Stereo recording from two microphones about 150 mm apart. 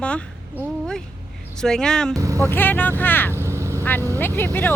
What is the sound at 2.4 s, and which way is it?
Speech, 10° left (ahead or behind).